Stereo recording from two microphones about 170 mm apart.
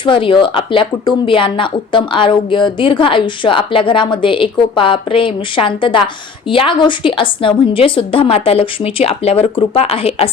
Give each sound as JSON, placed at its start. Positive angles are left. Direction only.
{"t": 0.0, "sound": "a woman's voice", "side_deg": 30}